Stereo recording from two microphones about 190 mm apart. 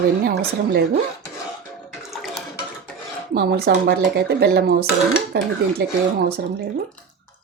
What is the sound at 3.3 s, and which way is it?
Speech, 55° right (ahead or behind).